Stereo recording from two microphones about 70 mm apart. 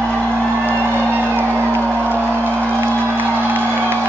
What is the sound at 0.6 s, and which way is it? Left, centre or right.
Music, right.